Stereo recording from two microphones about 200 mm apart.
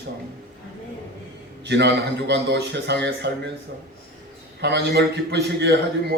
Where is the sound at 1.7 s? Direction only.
60° right (ahead or behind).